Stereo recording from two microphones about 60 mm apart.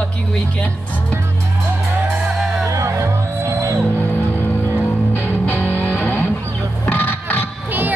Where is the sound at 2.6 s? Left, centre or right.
Right.